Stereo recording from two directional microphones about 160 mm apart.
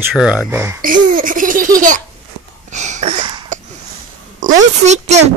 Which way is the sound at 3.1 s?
25° right (ahead or behind).